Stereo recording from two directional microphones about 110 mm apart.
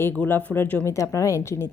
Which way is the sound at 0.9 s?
30° left (ahead or behind).